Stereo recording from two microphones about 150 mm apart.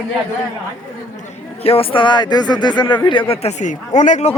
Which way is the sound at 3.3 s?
45° left (ahead or behind).